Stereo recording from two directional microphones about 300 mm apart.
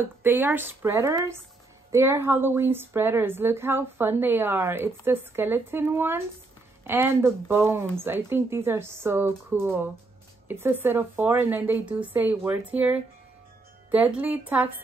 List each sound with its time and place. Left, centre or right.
0.0 s a woman's voice: centre